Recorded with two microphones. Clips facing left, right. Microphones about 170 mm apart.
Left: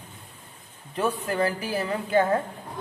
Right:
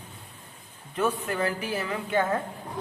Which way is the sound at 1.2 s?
35° left (ahead or behind).